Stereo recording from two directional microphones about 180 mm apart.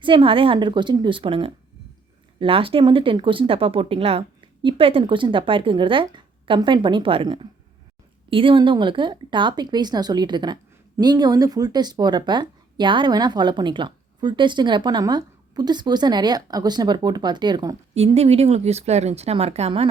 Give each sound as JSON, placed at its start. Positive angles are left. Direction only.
{"t": 0.0, "sound": "speech", "side_deg": -30}
{"t": 17.9, "sound": "speech", "side_deg": -35}